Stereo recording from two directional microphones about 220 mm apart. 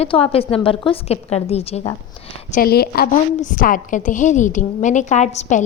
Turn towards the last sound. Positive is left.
turn(degrees=30)  # may be behind; listen again after turning